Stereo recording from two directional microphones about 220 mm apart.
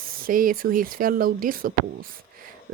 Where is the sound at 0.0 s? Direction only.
40° right (ahead or behind).